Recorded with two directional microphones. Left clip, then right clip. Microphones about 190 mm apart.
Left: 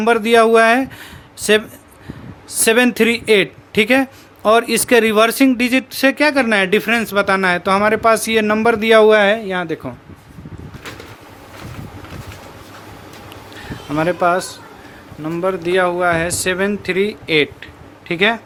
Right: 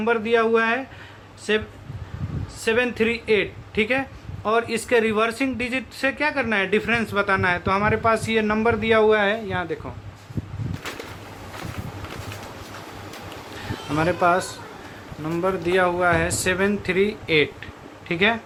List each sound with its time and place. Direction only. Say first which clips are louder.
0.0 s a man's voice: left 8 dB; 60° left (ahead or behind)
2.6 s a man's voice: left 8 dB; 55° left (ahead or behind)
13.9 s a man's voice: left 4 dB; 45° left (ahead or behind)